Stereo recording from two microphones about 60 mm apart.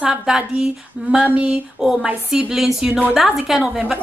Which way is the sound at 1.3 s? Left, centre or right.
Centre.